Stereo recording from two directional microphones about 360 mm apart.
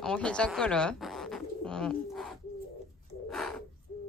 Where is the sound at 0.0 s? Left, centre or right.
Centre.